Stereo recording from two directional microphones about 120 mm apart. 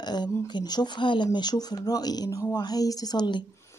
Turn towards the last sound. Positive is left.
turn(degrees=40)  # may be behind; listen again after turning